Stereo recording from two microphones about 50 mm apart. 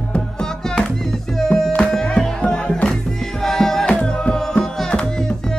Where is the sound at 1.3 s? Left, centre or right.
Centre.